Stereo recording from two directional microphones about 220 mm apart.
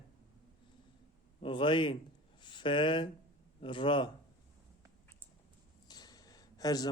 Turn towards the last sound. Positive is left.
turn(degrees=15)  # may be behind; listen again after turning